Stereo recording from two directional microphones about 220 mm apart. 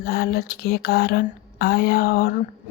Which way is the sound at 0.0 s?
45° left (ahead or behind).